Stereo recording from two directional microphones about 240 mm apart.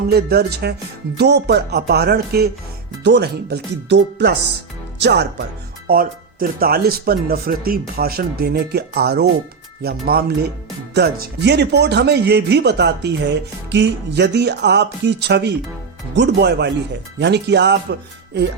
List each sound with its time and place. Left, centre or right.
0.1 s speech: right